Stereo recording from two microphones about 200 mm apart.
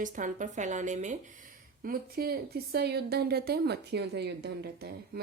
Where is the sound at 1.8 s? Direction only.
50° right (ahead or behind).